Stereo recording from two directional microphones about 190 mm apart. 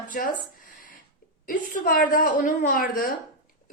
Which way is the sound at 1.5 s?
45° left (ahead or behind).